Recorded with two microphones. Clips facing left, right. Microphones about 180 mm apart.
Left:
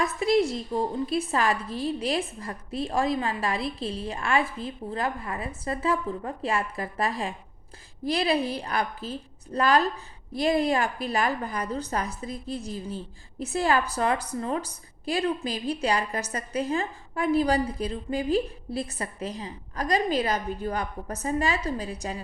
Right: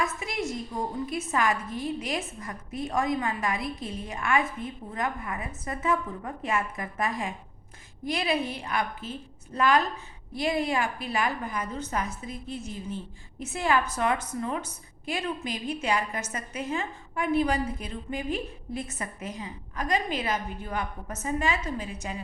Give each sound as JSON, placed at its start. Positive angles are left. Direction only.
{"t": 0.0, "sound": "a woman's voice", "side_deg": 35}